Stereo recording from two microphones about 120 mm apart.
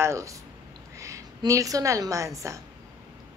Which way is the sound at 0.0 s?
25° right (ahead or behind).